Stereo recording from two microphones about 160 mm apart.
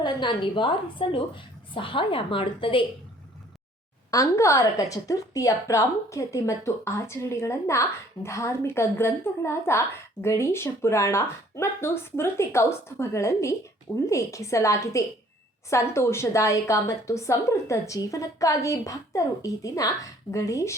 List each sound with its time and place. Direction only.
0.0 s a woman's voice: 30° left (ahead or behind)
4.1 s a woman's voice: 20° left (ahead or behind)